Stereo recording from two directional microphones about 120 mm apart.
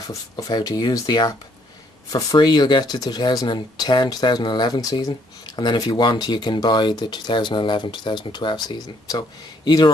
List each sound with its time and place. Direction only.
0.0 s speech: 30° left (ahead or behind)